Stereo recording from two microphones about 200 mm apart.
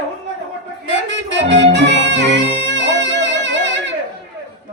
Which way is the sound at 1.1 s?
65° right (ahead or behind).